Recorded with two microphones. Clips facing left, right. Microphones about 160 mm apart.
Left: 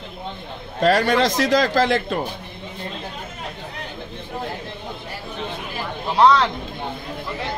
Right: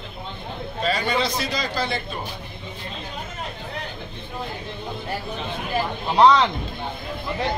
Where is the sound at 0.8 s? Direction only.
90° left.